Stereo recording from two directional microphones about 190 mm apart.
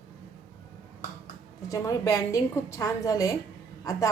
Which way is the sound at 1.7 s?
15° left (ahead or behind).